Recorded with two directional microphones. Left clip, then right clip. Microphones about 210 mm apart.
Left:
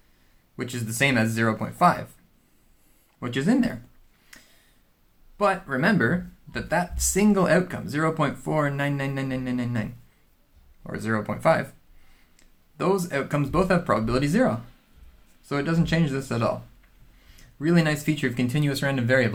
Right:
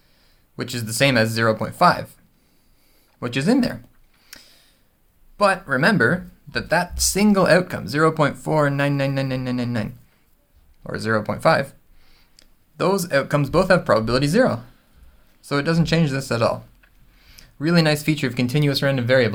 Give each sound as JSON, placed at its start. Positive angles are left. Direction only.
{"t": 0.5, "sound": "speech", "side_deg": -40}
{"t": 3.2, "sound": "speech", "side_deg": -40}
{"t": 4.3, "sound": "a sound", "side_deg": -40}
{"t": 5.4, "sound": "speech", "side_deg": -40}